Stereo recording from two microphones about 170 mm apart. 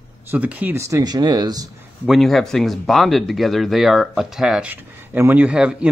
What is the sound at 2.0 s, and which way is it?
Speech, centre (ahead or behind).